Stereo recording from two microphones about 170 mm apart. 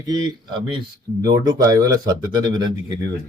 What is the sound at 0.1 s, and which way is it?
Speech, 25° right (ahead or behind).